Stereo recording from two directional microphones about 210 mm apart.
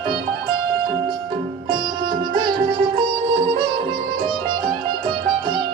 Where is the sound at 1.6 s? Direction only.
25° right (ahead or behind).